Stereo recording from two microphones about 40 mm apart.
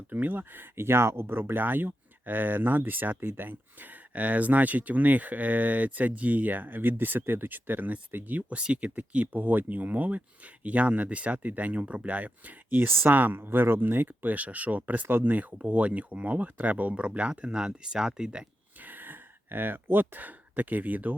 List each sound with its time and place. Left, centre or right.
0.1 s speech: right
9.2 s speech: right
12.8 s speech: right
13.1 s speech: right
16.9 s speech: right
18.8 s speech: right